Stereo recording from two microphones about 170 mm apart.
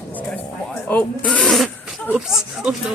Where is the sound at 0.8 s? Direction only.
10° left (ahead or behind).